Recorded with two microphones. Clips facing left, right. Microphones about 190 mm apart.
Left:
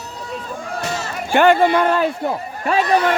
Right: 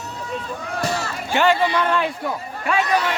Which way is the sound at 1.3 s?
55° left (ahead or behind).